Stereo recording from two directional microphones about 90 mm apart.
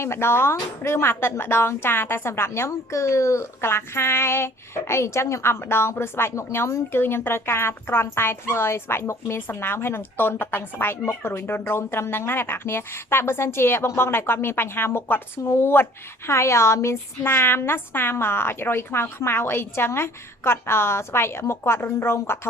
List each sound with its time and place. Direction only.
0.0 s speech: 30° left (ahead or behind)